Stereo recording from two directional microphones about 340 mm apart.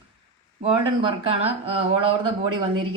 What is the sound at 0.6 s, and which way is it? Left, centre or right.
A woman's voice, centre.